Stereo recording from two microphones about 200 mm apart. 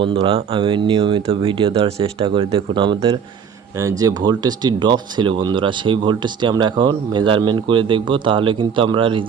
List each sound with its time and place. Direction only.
0.0 s speech: 25° right (ahead or behind)